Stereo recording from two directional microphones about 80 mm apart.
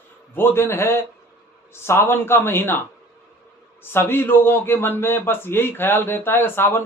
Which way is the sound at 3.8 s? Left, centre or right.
Left.